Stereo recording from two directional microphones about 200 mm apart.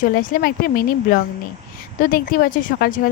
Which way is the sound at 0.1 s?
45° left (ahead or behind).